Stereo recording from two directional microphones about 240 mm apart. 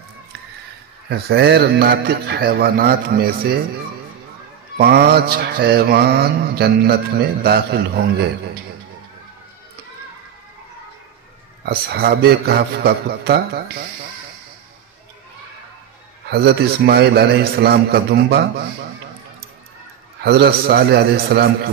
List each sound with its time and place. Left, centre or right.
1.0 s mantra: right
4.7 s mantra: right
11.6 s mantra: right
16.3 s a man's voice: right
20.2 s a man's voice: right